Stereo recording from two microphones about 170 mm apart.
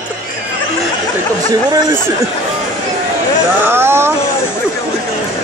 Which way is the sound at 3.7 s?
15° right (ahead or behind).